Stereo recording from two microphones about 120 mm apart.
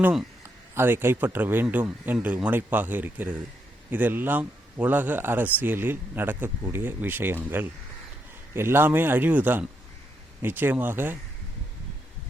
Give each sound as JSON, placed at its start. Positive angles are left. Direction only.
{"t": 0.7, "sound": "a man's voice", "side_deg": -20}